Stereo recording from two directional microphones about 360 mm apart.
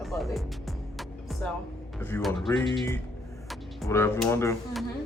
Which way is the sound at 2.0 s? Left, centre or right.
Centre.